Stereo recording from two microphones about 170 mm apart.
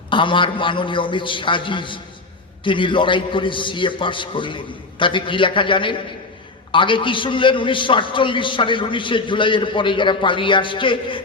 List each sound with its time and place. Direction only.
0.1 s a man's voice: 30° left (ahead or behind)